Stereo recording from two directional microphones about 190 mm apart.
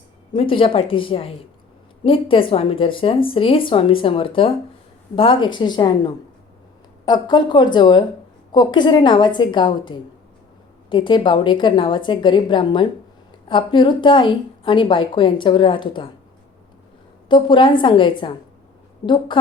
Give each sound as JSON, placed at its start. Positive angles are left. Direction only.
{"t": 0.3, "sound": "a woman's voice", "side_deg": 30}
{"t": 17.2, "sound": "a woman's voice", "side_deg": 25}